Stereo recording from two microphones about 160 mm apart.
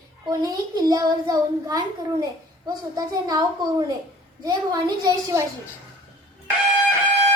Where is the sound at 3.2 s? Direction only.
25° right (ahead or behind).